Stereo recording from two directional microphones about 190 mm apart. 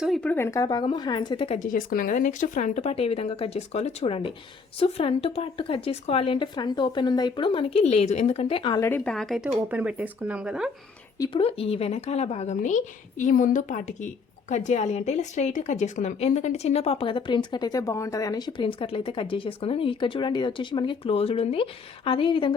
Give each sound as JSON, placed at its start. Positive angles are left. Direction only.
{"t": 0.0, "sound": "a woman's voice", "side_deg": 5}
{"t": 1.5, "sound": "a woman's voice", "side_deg": 45}
{"t": 9.0, "sound": "speech", "side_deg": 0}
{"t": 11.2, "sound": "a woman's voice", "side_deg": 30}